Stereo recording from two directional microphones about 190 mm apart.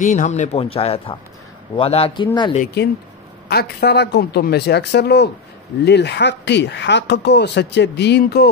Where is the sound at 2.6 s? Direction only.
60° left (ahead or behind).